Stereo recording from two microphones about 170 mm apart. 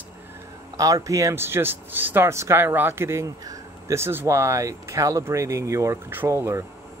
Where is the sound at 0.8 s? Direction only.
20° right (ahead or behind).